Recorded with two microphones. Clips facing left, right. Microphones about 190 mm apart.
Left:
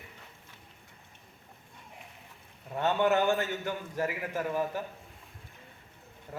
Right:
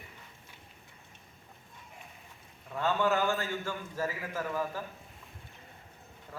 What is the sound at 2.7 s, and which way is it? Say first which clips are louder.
A man's voice: left 2 dB; 20° left (ahead or behind).